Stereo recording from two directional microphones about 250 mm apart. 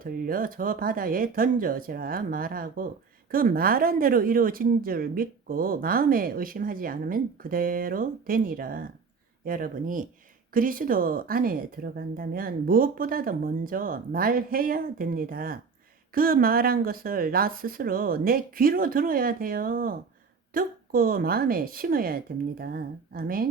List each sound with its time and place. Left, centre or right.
0.0 s speech: right